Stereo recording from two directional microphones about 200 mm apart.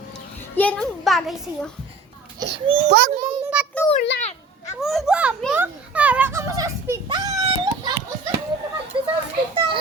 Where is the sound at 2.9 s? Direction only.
40° right (ahead or behind).